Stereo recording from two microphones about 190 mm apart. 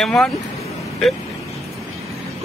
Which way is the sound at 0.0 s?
Centre (ahead or behind).